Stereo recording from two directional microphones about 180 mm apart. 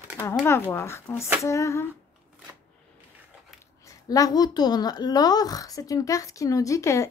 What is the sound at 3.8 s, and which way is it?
A woman's voice, 20° left (ahead or behind).